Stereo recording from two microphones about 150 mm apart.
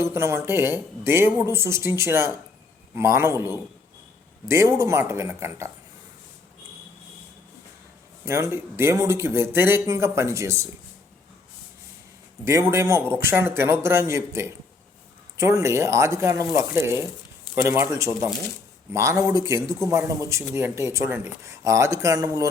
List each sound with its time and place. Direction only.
0.0 s a man's voice: 20° right (ahead or behind)
8.2 s a man's voice: 20° right (ahead or behind)
12.5 s a man's voice: 20° right (ahead or behind)